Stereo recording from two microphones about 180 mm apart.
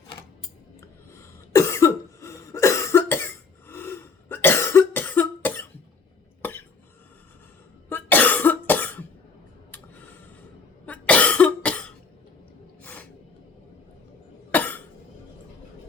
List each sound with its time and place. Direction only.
0.8 s cough: 15° left (ahead or behind)
7.9 s cough: 10° left (ahead or behind)
9.7 s a sound: 10° left (ahead or behind)
10.8 s cough: 10° left (ahead or behind)
12.8 s a sound: 10° left (ahead or behind)
14.5 s cough: 10° left (ahead or behind)